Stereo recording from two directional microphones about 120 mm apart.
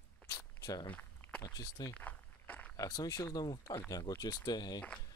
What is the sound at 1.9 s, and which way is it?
Walk, 15° left (ahead or behind).